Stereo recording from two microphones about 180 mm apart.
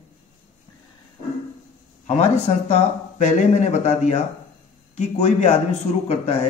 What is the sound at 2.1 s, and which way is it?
Speech, 35° left (ahead or behind).